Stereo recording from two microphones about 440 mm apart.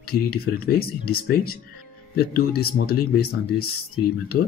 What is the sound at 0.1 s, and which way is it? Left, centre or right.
Speech, left.